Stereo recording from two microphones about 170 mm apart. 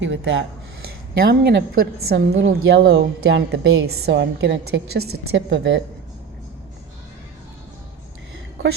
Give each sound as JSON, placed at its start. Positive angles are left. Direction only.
{"t": 0.0, "sound": "a woman's voice", "side_deg": -90}
{"t": 1.3, "sound": "a woman's voice", "side_deg": -75}
{"t": 2.4, "sound": "a woman's voice", "side_deg": -90}